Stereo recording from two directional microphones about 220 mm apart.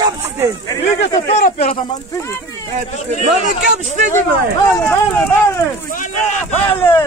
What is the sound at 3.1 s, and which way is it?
Speech, 35° right (ahead or behind).